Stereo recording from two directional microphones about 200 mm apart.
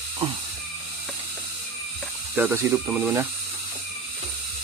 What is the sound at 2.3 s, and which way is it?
Speech, 10° right (ahead or behind).